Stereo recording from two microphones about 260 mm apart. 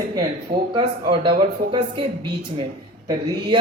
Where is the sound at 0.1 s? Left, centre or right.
Centre.